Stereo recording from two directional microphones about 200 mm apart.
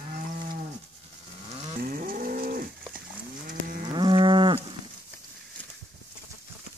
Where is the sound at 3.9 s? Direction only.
25° right (ahead or behind).